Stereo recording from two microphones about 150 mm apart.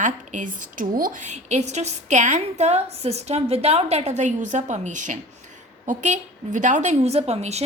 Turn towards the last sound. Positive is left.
turn(degrees=-45)  # may be behind; listen again after turning